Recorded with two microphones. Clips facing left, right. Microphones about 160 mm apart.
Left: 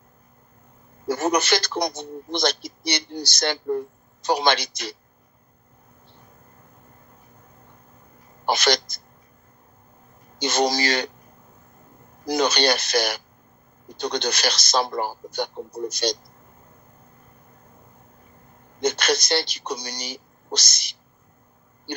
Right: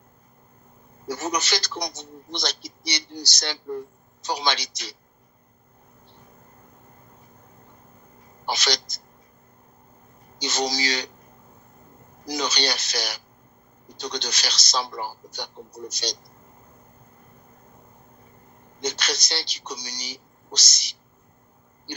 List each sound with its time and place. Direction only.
1.0 s a man's voice: 55° left (ahead or behind)
8.4 s a man's voice: 55° left (ahead or behind)
10.3 s a man's voice: 55° left (ahead or behind)
12.2 s a man's voice: 55° left (ahead or behind)
18.8 s a man's voice: 55° left (ahead or behind)